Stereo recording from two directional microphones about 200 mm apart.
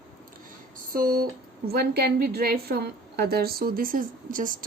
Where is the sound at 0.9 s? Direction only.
45° right (ahead or behind).